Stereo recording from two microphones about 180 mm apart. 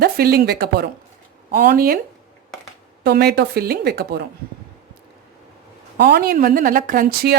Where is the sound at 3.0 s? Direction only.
60° right (ahead or behind).